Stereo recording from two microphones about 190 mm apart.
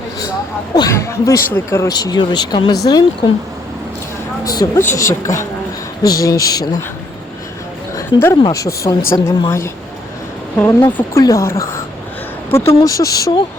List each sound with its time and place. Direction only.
0.7 s speech: 15° left (ahead or behind)
4.4 s speech: 15° left (ahead or behind)
7.9 s a woman's voice: 15° left (ahead or behind)